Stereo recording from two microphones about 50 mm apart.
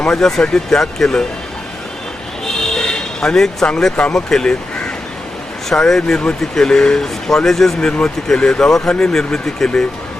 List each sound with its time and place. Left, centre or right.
0.0 s speech: centre
2.6 s a sound: centre
3.9 s speech: left
4.3 s speech: centre
5.6 s speech: centre
7.8 s speech: centre